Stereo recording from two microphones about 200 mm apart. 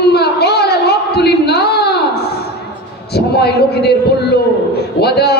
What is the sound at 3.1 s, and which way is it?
A man's voice, 55° left (ahead or behind).